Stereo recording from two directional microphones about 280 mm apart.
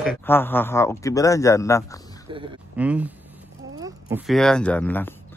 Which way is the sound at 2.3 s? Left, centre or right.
Centre.